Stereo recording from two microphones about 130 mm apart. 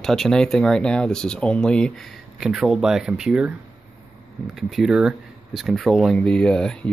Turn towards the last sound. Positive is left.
turn(degrees=5)  # may be behind; listen again after turning